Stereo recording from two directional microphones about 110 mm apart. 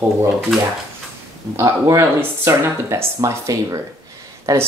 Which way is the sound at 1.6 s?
25° right (ahead or behind).